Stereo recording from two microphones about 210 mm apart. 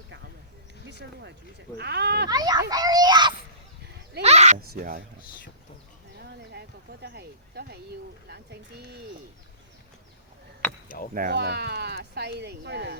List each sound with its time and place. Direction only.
0.9 s speech: 55° right (ahead or behind)
2.3 s a child's voice: 20° right (ahead or behind)
4.2 s speech: 30° right (ahead or behind)
4.7 s speech: 45° right (ahead or behind)
6.1 s speech: 50° right (ahead or behind)
10.6 s a sound: 5° left (ahead or behind)
11.1 s speech: 45° right (ahead or behind)